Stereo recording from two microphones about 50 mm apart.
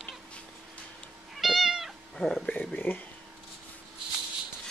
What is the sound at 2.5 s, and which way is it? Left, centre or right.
Speech, left.